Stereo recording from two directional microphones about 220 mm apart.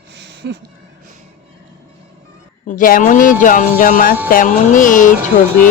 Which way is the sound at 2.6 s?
40° left (ahead or behind).